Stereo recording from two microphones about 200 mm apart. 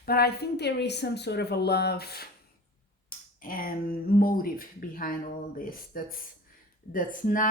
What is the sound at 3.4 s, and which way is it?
Speech, 45° left (ahead or behind).